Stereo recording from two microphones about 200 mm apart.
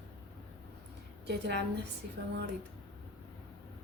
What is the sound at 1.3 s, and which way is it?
Speech, 55° right (ahead or behind).